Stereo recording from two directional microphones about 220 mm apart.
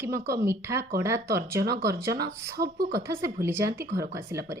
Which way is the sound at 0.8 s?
45° right (ahead or behind).